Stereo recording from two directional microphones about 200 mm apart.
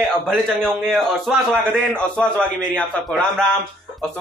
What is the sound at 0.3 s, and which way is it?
A man's voice, centre (ahead or behind).